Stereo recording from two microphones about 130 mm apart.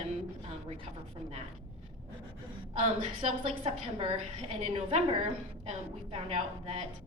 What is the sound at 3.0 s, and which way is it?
A woman's voice, 55° right (ahead or behind).